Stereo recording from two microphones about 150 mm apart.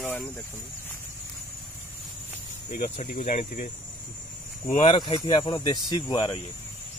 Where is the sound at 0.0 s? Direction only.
5° left (ahead or behind).